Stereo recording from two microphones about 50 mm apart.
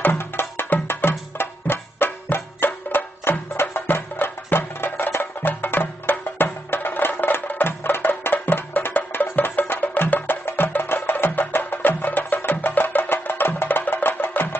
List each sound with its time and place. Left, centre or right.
0.0 s music: left